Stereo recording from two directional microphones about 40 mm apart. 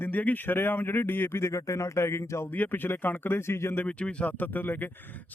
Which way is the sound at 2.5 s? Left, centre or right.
Left.